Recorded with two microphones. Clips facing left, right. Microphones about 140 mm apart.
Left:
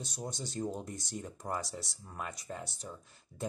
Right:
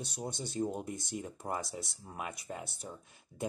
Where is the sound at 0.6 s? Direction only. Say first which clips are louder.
Right 2 dB; 5° right (ahead or behind).